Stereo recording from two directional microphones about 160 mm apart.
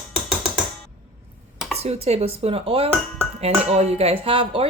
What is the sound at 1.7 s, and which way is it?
Speech, 40° right (ahead or behind).